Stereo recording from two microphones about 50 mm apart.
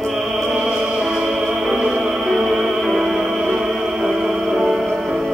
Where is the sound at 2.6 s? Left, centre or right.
Centre.